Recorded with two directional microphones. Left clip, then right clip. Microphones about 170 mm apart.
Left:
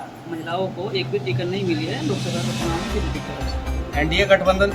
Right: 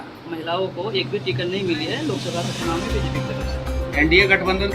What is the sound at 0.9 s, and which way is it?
Speech, 25° right (ahead or behind).